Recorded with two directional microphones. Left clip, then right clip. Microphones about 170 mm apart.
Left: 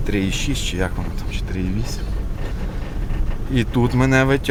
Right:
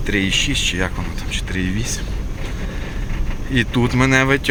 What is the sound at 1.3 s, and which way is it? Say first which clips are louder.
Speech: right 6 dB; centre (ahead or behind).